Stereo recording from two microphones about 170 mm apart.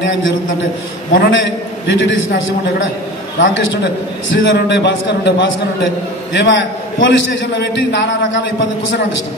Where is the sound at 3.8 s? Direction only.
90° left.